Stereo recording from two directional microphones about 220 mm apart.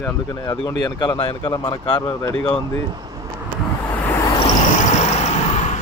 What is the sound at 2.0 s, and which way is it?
Speech, 10° left (ahead or behind).